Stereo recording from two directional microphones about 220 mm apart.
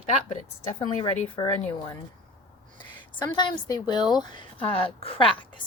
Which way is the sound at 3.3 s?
20° left (ahead or behind).